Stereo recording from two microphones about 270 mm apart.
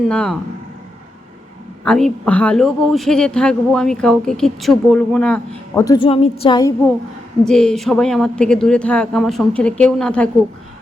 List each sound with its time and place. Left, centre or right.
0.1 s a man's voice: centre
1.8 s a man's voice: centre
7.4 s a man's voice: centre